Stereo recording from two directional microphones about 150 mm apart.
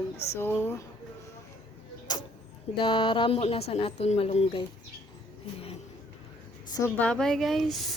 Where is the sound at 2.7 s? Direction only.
35° left (ahead or behind).